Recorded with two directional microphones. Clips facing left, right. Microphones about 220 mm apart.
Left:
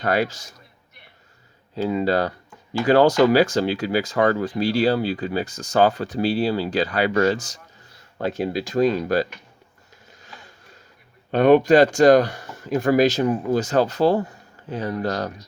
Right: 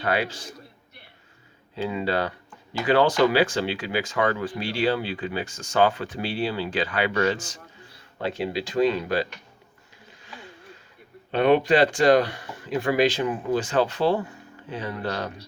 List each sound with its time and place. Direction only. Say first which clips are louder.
0.0 s speech: left 4 dB; 40° left (ahead or behind)
1.7 s speech: left 5 dB; 40° left (ahead or behind)
10.1 s a sound: right 3 dB; 45° left (ahead or behind)
11.3 s speech: left 5 dB; 45° left (ahead or behind)